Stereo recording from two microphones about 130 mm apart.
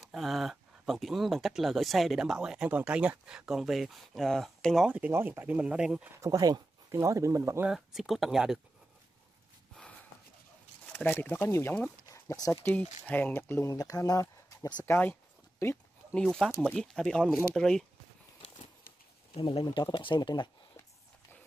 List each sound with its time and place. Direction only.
0.0 s speech: centre (ahead or behind)
4.8 s speech: 10° right (ahead or behind)
6.2 s speech: 30° right (ahead or behind)
7.6 s speech: 5° right (ahead or behind)
10.9 s speech: 15° left (ahead or behind)
13.0 s speech: 15° left (ahead or behind); by 14.9 s 30° left (ahead or behind)
14.9 s speech: 15° left (ahead or behind)
19.3 s speech: 45° left (ahead or behind)
19.6 s speech: 35° left (ahead or behind)